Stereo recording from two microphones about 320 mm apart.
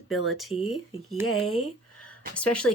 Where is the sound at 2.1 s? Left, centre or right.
Centre.